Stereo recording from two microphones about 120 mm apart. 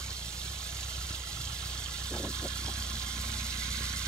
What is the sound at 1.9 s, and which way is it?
Vehicle, 5° left (ahead or behind).